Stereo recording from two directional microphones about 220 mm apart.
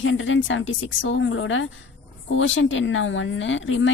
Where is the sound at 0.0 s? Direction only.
60° left (ahead or behind).